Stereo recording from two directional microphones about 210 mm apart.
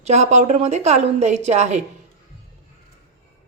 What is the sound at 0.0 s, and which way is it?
A woman's voice, 35° right (ahead or behind).